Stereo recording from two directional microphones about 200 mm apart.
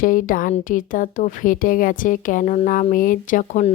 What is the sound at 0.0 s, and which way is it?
Speech, 45° left (ahead or behind).